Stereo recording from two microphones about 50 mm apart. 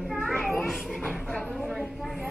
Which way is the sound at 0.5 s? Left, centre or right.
Centre.